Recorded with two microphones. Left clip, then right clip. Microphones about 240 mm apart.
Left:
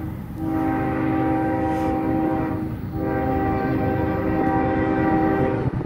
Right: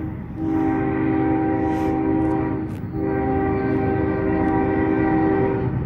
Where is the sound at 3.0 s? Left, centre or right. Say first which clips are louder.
Right 1 dB; left.